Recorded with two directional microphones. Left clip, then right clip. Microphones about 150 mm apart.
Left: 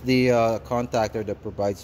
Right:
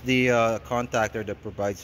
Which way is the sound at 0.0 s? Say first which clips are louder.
Left 1 dB; 10° left (ahead or behind).